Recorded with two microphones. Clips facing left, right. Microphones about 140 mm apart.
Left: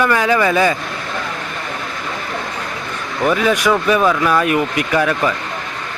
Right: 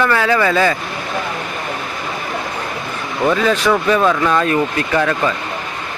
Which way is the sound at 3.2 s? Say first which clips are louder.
Even; 10° left (ahead or behind).